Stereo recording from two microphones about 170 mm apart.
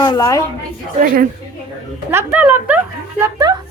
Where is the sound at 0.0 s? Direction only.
20° left (ahead or behind).